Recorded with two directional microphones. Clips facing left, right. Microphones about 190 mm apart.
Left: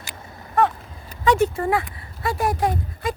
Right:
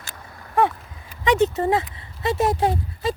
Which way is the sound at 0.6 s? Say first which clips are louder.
Even; 10° right (ahead or behind).